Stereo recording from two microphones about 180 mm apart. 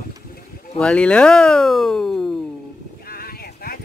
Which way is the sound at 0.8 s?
5° left (ahead or behind).